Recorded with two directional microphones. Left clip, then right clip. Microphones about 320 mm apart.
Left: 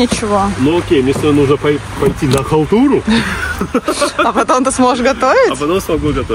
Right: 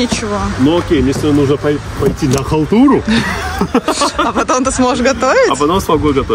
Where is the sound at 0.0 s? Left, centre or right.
Centre.